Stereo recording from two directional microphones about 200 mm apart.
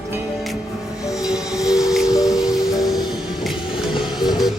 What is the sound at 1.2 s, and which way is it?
Music, 5° right (ahead or behind).